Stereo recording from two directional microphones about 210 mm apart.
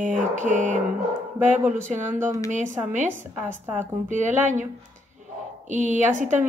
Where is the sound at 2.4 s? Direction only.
35° right (ahead or behind).